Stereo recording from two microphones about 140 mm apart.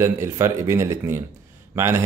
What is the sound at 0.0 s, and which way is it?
Speech, 20° right (ahead or behind).